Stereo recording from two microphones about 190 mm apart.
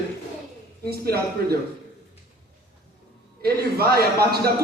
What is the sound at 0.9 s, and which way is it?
Speech, 55° right (ahead or behind).